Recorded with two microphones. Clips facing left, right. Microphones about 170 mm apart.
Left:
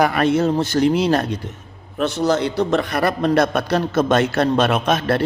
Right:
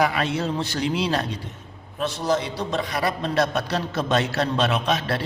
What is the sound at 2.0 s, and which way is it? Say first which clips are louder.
A man's voice: left 5 dB; 70° left (ahead or behind).